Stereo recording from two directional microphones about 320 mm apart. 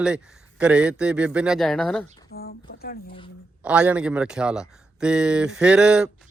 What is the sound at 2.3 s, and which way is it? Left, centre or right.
Speech, left.